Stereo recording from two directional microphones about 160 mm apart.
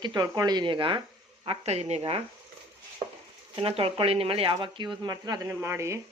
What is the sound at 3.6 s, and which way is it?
Speech, 35° right (ahead or behind).